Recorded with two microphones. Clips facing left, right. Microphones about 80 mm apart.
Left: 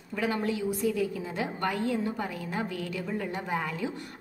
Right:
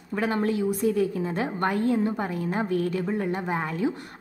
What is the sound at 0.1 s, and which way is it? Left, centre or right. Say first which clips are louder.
A woman's voice: right 4 dB; right.